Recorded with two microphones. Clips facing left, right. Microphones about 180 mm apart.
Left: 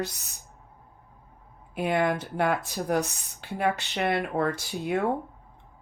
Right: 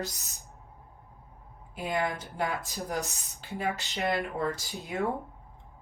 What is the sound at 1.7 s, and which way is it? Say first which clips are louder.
Speech: left 6 dB; 70° left (ahead or behind).